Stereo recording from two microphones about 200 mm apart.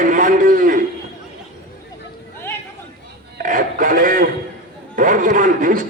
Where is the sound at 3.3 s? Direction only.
40° right (ahead or behind).